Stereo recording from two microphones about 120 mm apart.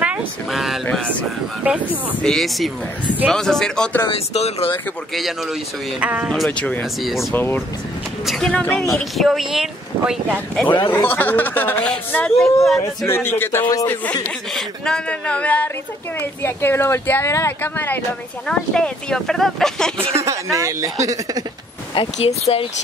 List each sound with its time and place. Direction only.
0.0 s speech: 5° right (ahead or behind)
1.6 s speech: 15° right (ahead or behind)
2.2 s speech: centre (ahead or behind)
4.1 s speech: 60° left (ahead or behind)
5.1 s speech: centre (ahead or behind)
6.4 s speech: 10° left (ahead or behind)
7.3 s speech: 20° left (ahead or behind)
8.3 s speech: 5° left (ahead or behind)
10.9 s speech: 15° left (ahead or behind)
12.7 s speech: 20° left (ahead or behind)
14.5 s speech: 5° left (ahead or behind)
18.5 s speech: 5° left (ahead or behind)
20.2 s speech: 25° right (ahead or behind)
21.9 s speech: 55° left (ahead or behind)